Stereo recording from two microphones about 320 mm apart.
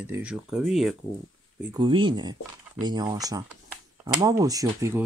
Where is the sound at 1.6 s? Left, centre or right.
Centre.